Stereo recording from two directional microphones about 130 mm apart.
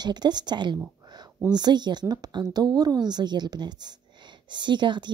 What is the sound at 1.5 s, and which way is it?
A woman's voice, 35° right (ahead or behind).